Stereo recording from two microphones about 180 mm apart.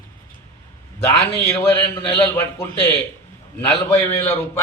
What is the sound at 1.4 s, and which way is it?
A man's voice, 10° left (ahead or behind).